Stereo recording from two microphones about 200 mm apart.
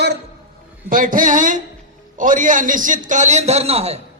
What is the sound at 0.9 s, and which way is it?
A man's voice, 45° right (ahead or behind).